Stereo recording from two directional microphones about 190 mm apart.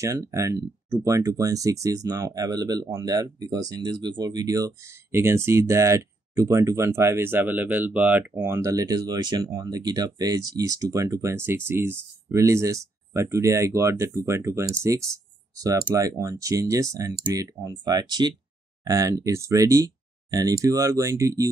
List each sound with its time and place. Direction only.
0.0 s speech: 15° right (ahead or behind)